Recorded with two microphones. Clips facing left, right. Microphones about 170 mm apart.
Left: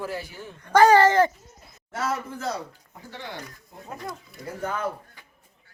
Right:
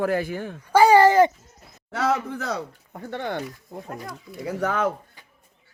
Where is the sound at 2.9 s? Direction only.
60° right (ahead or behind).